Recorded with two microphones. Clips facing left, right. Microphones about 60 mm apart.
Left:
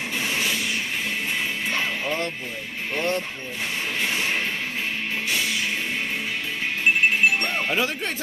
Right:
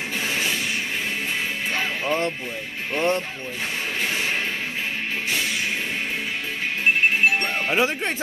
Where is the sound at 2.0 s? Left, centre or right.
Right.